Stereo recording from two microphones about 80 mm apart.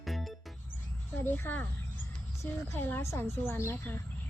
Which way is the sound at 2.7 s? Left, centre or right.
Left.